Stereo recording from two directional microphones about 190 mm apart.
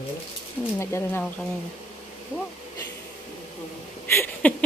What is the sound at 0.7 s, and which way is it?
Speech, 10° left (ahead or behind).